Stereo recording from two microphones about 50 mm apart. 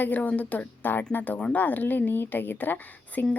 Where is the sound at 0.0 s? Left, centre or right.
Left.